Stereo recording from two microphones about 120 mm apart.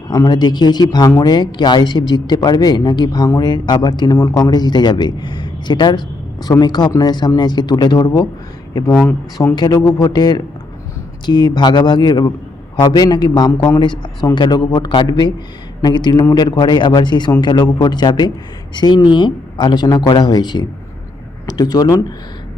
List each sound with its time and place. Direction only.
0.1 s speech: 35° left (ahead or behind)
8.9 s speech: 10° left (ahead or behind)
9.6 s speech: 30° left (ahead or behind)